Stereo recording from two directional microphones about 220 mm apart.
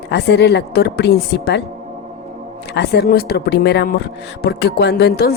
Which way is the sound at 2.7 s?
50° left (ahead or behind).